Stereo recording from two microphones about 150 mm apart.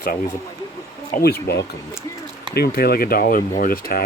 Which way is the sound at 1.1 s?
90° left.